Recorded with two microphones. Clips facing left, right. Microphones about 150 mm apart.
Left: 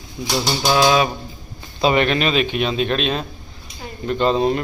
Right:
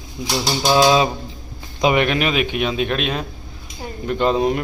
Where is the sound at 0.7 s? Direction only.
20° right (ahead or behind).